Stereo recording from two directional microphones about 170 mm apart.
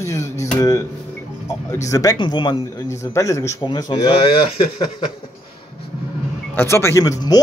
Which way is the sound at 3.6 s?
30° left (ahead or behind).